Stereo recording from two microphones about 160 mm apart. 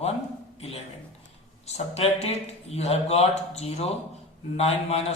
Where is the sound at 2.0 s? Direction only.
40° left (ahead or behind).